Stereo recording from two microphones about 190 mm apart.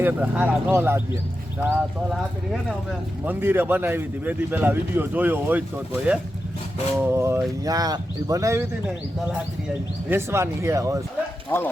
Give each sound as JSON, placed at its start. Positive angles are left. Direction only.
{"t": 0.0, "sound": "speech", "side_deg": -10}
{"t": 3.2, "sound": "speech", "side_deg": -10}
{"t": 10.1, "sound": "speech", "side_deg": -15}
{"t": 11.4, "sound": "speech", "side_deg": 10}